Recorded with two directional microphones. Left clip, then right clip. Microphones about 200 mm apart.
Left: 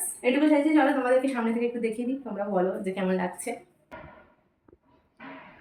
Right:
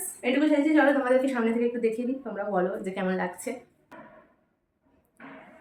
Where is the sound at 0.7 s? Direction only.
20° right (ahead or behind).